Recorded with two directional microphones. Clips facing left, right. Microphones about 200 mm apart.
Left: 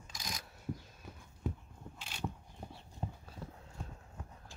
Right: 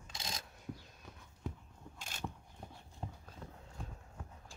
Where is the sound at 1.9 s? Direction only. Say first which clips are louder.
Right 1 dB; 45° right (ahead or behind).